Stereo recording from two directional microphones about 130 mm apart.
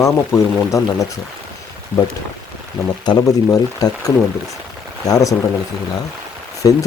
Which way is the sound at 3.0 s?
30° left (ahead or behind).